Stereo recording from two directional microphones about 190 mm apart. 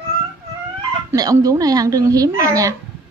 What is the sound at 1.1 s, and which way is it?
Speech, 20° right (ahead or behind).